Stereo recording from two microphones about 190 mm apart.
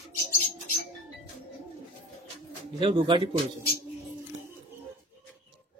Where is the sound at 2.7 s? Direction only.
25° right (ahead or behind).